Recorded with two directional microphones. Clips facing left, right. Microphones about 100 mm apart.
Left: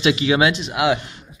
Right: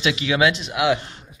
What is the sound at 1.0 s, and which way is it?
Speech, 35° right (ahead or behind).